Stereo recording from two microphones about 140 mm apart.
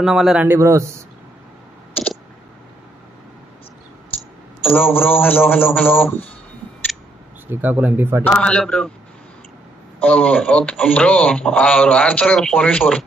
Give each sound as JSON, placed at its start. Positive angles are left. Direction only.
{"t": 0.0, "sound": "speech", "side_deg": 0}
{"t": 0.6, "sound": "speech", "side_deg": -20}
{"t": 4.6, "sound": "speech", "side_deg": 15}
{"t": 7.4, "sound": "speech", "side_deg": -15}
{"t": 8.2, "sound": "speech", "side_deg": 10}
{"t": 9.9, "sound": "speech", "side_deg": 10}